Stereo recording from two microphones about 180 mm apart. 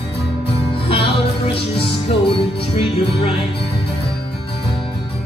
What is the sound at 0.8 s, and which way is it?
Music, 30° left (ahead or behind).